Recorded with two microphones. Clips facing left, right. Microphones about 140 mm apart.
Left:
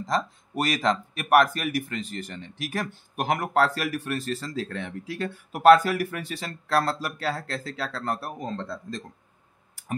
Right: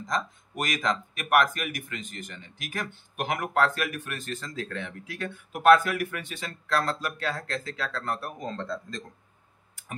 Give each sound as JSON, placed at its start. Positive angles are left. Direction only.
{"t": 0.0, "sound": "speech", "side_deg": 30}
{"t": 8.5, "sound": "speech", "side_deg": 5}